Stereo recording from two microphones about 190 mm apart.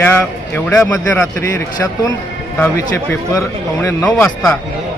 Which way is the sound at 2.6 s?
10° left (ahead or behind).